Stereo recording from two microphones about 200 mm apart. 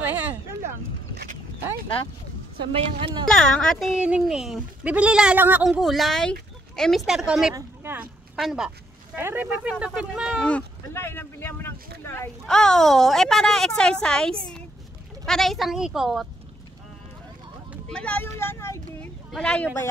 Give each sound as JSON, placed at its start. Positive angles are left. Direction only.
{"t": 0.0, "sound": "a sound", "side_deg": -10}
{"t": 2.7, "sound": "a woman's voice", "side_deg": -25}
{"t": 3.3, "sound": "speech", "side_deg": 5}
{"t": 6.7, "sound": "a sound", "side_deg": 0}
{"t": 7.1, "sound": "speech", "side_deg": 0}
{"t": 10.4, "sound": "speech", "side_deg": 10}
{"t": 17.8, "sound": "speech", "side_deg": 5}